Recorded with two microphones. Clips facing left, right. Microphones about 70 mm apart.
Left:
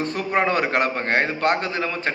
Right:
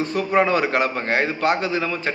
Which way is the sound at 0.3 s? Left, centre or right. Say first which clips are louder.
Right 2 dB; left.